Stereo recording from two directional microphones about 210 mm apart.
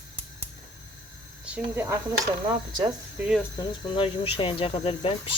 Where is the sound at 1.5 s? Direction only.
10° right (ahead or behind).